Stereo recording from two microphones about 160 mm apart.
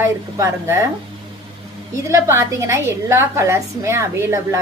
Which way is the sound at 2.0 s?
20° right (ahead or behind).